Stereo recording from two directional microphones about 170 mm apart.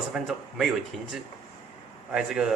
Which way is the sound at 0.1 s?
Centre (ahead or behind).